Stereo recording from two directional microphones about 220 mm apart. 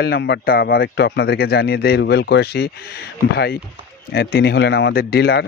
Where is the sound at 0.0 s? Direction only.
45° left (ahead or behind).